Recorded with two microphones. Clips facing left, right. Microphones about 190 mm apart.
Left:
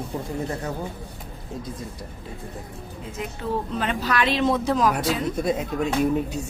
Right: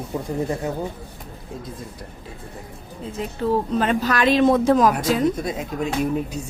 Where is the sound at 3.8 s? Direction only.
45° right (ahead or behind).